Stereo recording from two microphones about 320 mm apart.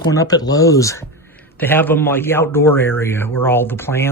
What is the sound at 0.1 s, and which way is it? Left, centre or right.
A man's voice, centre.